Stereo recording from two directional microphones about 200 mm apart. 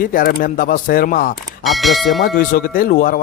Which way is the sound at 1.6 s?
Centre (ahead or behind).